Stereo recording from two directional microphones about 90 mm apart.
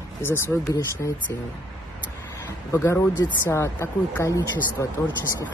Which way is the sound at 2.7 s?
25° left (ahead or behind).